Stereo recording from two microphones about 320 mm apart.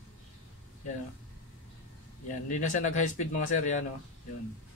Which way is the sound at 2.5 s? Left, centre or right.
Left.